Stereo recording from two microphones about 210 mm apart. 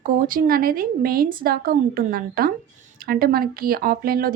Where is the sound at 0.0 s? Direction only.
40° right (ahead or behind).